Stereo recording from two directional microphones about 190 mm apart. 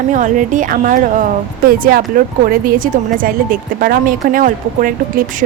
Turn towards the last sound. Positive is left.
turn(degrees=-45)  # may be behind; listen again after turning